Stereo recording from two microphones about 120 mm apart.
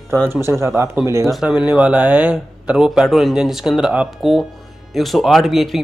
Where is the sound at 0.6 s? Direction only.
20° right (ahead or behind).